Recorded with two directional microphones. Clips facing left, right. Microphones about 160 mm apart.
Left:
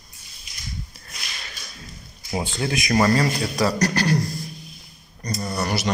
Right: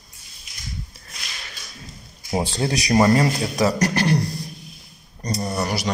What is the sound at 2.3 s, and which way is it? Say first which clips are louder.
Speech: right 3 dB; 35° right (ahead or behind).